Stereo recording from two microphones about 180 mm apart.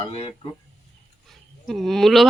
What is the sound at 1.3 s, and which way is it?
Wild animals, centre (ahead or behind).